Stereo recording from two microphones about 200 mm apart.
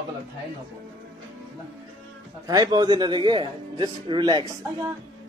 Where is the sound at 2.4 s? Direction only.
20° right (ahead or behind).